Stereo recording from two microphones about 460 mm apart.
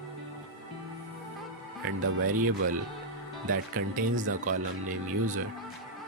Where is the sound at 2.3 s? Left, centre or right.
Centre.